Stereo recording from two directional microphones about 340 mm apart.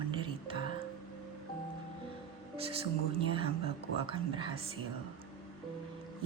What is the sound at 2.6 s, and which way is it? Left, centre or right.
A woman's voice, centre.